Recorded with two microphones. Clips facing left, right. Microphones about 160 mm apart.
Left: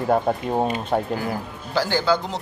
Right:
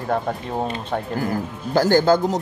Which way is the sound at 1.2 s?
45° right (ahead or behind).